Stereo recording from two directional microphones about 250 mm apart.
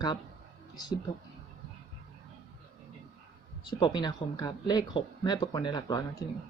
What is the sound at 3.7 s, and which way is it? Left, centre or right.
Speech, centre.